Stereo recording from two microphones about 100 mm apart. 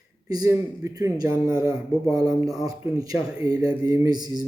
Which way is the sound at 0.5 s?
30° right (ahead or behind).